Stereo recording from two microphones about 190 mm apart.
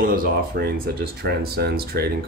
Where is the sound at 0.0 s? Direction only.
50° right (ahead or behind).